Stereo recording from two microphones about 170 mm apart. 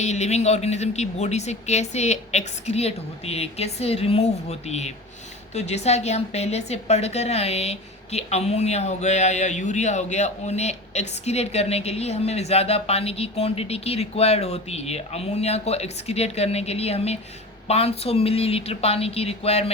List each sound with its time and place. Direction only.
0.0 s speech: 40° left (ahead or behind)